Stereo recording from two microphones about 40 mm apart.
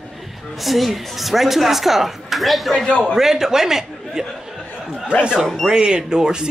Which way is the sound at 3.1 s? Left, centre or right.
Centre.